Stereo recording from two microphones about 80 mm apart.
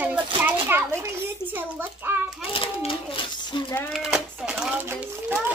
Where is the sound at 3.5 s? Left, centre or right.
Left.